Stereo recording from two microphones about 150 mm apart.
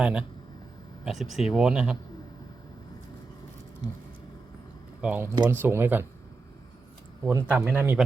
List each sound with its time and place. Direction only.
0.0 s speech: 5° right (ahead or behind)
4.9 s speech: 10° right (ahead or behind)
7.3 s speech: 15° right (ahead or behind)